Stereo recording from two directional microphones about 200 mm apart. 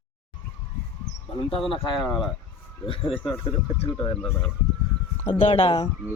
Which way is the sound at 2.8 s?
25° left (ahead or behind).